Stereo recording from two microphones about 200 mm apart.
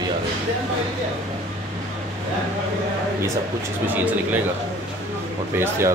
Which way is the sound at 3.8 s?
10° right (ahead or behind).